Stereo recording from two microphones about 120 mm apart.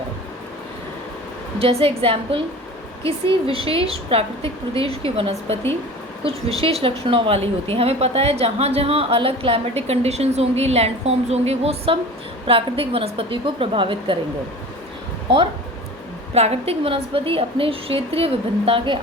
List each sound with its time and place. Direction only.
1.5 s a woman's voice: 55° right (ahead or behind)
16.3 s a woman's voice: 60° right (ahead or behind)